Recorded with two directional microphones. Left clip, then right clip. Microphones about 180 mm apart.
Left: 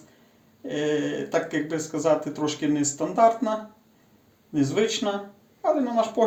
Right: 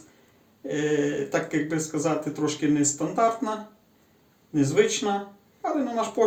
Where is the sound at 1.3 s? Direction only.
50° left (ahead or behind).